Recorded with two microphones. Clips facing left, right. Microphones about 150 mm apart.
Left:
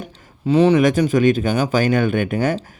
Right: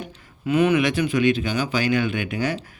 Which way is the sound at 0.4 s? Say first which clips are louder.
Left 5 dB; 30° left (ahead or behind).